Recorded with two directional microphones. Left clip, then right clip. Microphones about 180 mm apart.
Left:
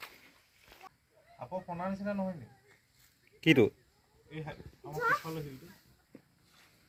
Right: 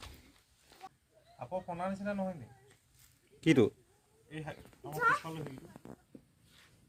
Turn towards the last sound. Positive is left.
turn(degrees=-15)  # may be behind; listen again after turning